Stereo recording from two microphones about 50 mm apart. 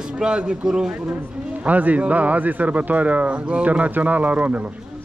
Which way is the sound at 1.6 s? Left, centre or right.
Right.